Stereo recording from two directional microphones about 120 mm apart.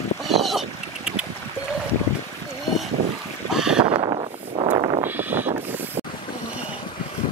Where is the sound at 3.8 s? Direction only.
45° right (ahead or behind).